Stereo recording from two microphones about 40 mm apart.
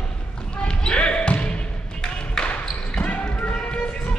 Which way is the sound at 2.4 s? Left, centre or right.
Centre.